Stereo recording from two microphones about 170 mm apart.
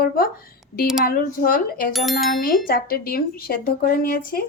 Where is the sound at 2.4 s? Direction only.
60° left (ahead or behind).